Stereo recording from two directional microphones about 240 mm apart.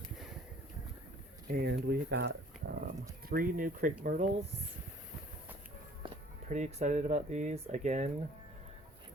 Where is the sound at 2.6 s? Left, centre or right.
Right.